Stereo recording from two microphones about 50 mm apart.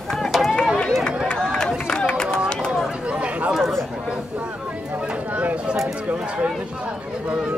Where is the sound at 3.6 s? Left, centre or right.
Centre.